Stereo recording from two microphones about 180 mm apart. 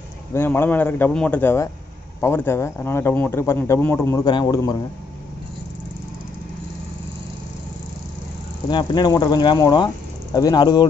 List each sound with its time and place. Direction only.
0.3 s speech: 10° left (ahead or behind)
8.6 s speech: 25° left (ahead or behind)